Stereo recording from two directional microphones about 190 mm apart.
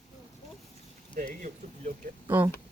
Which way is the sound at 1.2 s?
45° right (ahead or behind).